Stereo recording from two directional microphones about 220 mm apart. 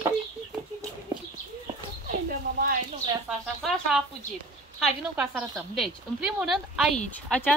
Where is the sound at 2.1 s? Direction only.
40° right (ahead or behind).